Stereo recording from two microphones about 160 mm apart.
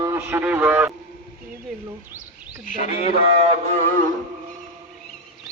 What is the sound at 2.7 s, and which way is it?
Speech, 45° left (ahead or behind).